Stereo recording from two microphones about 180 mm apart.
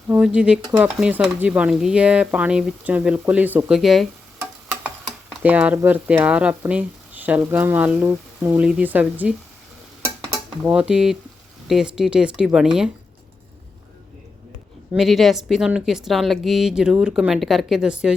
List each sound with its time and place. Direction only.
0.1 s speech: 5° right (ahead or behind)
5.3 s speech: 5° right (ahead or behind)
10.6 s speech: 5° right (ahead or behind)
14.9 s speech: centre (ahead or behind)